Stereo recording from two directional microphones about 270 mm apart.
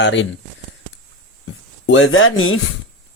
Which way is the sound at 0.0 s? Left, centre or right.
Left.